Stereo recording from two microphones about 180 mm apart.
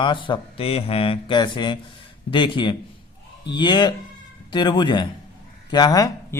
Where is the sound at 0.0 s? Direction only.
25° left (ahead or behind).